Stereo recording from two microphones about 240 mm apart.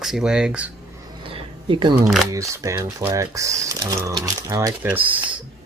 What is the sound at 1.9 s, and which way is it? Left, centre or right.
Speech, centre.